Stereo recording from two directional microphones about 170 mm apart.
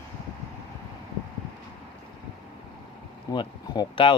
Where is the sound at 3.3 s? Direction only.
25° left (ahead or behind).